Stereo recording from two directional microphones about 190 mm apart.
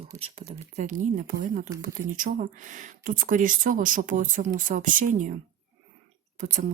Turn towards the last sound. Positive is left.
turn(degrees=-40)  # may be behind; listen again after turning